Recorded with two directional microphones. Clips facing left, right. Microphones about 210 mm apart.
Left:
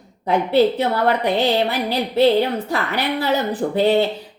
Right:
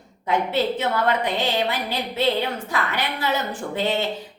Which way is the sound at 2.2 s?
35° left (ahead or behind).